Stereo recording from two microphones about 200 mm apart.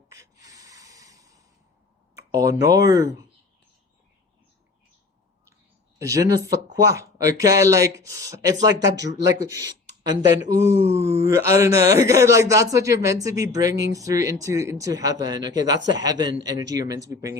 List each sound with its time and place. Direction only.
0.1 s snort: 15° right (ahead or behind)
2.1 s speech: 15° right (ahead or behind)
6.0 s speech: 15° right (ahead or behind)